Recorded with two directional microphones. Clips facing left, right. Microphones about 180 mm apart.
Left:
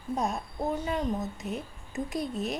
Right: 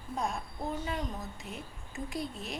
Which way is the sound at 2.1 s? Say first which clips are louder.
Left 6 dB; 20° left (ahead or behind).